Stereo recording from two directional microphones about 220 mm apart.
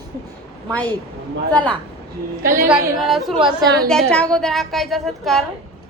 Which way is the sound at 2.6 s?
Centre (ahead or behind).